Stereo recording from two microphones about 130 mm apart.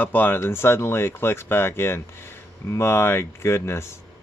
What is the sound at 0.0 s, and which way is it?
Speech, 15° left (ahead or behind).